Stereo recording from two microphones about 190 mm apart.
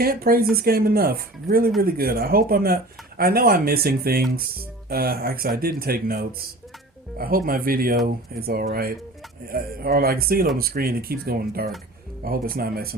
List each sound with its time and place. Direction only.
0.0 s speech: 50° right (ahead or behind)